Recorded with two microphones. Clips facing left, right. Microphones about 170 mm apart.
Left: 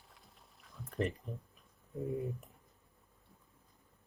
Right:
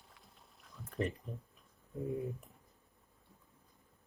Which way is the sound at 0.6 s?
Centre (ahead or behind).